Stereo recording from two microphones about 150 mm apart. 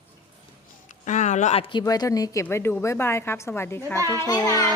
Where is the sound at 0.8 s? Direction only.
55° left (ahead or behind).